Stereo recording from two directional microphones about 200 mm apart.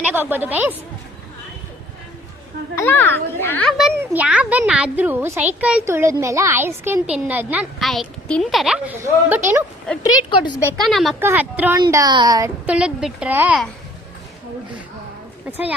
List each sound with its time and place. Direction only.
0.0 s a child's voice: 10° right (ahead or behind)
2.7 s a child's voice: 10° left (ahead or behind); by 9.6 s 10° right (ahead or behind)
9.9 s a woman's voice: 5° left (ahead or behind)
10.2 s a woman's voice: 25° left (ahead or behind)
10.8 s a woman's voice: centre (ahead or behind)
11.8 s speech: 20° right (ahead or behind)
12.6 s a woman's voice: 5° right (ahead or behind)
15.4 s a child's voice: 10° right (ahead or behind)